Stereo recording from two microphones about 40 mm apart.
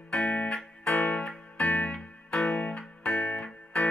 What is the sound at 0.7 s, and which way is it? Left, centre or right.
Music, left.